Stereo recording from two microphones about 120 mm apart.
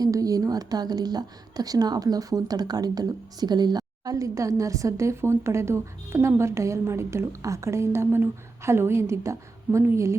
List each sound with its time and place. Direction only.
0.0 s a woman's voice: 30° right (ahead or behind)